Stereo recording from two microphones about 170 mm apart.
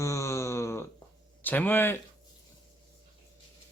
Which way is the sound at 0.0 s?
15° left (ahead or behind).